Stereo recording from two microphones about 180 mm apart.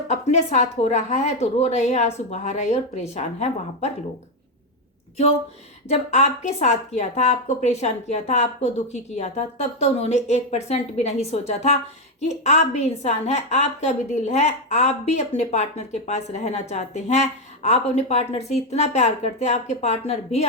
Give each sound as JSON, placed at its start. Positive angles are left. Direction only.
{"t": 0.1, "sound": "a woman's voice", "side_deg": 40}
{"t": 5.9, "sound": "a woman's voice", "side_deg": 40}